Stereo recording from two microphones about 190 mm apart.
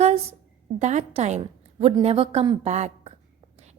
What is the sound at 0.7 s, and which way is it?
Speech, 35° right (ahead or behind).